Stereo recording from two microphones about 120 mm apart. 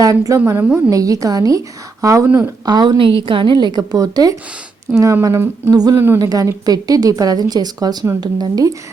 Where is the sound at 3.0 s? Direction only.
50° right (ahead or behind); by 5.7 s 20° right (ahead or behind).